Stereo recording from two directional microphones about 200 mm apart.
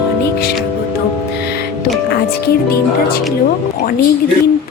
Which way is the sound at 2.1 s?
50° left (ahead or behind).